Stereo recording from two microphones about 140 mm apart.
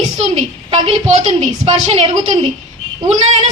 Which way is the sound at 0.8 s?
55° right (ahead or behind).